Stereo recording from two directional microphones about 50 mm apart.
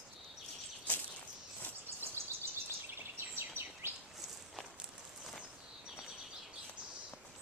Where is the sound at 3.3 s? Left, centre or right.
Right.